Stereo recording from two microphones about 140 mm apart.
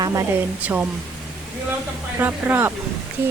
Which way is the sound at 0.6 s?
10° right (ahead or behind).